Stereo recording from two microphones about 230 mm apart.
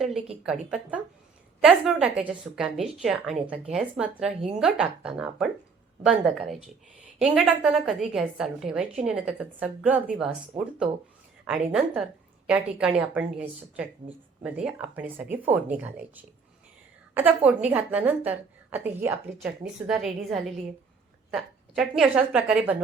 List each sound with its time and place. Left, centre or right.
0.0 s a woman's voice: centre
11.4 s a woman's voice: centre